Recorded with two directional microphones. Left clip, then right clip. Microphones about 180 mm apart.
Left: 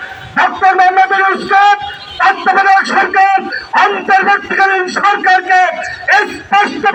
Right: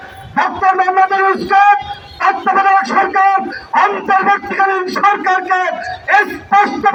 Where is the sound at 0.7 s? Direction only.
30° left (ahead or behind).